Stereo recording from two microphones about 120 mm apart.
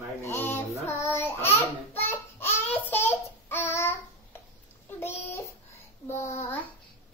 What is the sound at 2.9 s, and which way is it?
Babbling, 20° left (ahead or behind).